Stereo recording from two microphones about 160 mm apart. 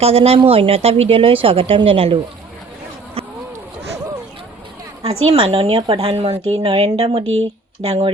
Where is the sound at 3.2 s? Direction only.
35° right (ahead or behind).